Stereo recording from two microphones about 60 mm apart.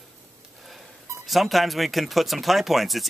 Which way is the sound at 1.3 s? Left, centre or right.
Centre.